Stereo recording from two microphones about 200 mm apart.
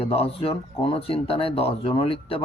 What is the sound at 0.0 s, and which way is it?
Speech, 30° left (ahead or behind).